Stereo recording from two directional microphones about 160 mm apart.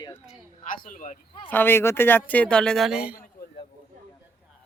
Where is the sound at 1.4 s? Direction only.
10° left (ahead or behind); by 3.1 s 5° right (ahead or behind).